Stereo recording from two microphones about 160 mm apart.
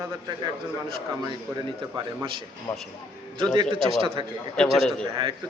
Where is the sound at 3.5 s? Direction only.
30° right (ahead or behind).